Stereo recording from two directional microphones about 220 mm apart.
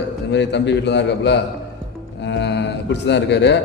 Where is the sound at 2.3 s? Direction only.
50° left (ahead or behind).